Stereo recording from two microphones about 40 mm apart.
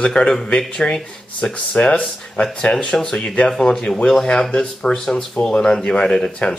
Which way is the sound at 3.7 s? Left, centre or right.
Centre.